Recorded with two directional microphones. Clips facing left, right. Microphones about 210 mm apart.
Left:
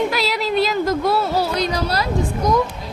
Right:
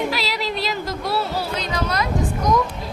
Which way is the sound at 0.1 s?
50° left (ahead or behind).